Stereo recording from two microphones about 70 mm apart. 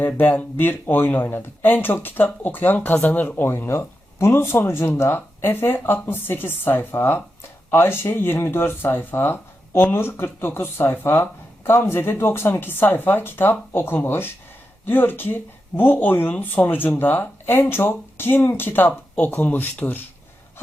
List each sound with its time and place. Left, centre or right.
0.0 s speech: left